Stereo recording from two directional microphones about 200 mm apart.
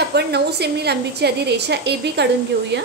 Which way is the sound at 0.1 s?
55° right (ahead or behind).